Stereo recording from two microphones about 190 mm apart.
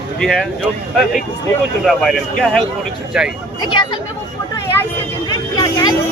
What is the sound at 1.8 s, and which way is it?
Speech, centre (ahead or behind).